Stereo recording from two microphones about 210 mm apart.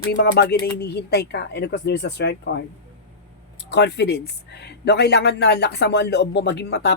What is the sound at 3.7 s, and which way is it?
Speech, 55° left (ahead or behind).